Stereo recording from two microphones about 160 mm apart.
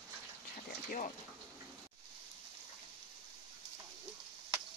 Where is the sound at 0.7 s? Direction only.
50° left (ahead or behind).